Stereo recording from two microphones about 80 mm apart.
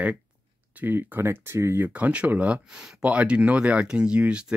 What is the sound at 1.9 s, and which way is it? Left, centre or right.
Speech, centre.